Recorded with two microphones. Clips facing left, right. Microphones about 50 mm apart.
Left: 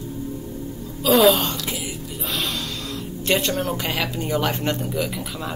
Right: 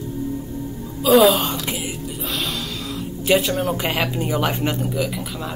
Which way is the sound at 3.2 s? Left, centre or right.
Centre.